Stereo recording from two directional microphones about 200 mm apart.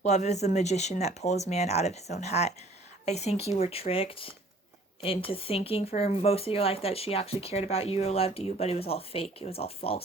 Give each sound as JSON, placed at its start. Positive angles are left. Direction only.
{"t": 0.0, "sound": "speech", "side_deg": 35}